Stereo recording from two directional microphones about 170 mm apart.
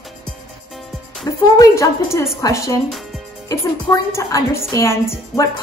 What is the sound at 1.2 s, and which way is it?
A woman's voice, 20° left (ahead or behind).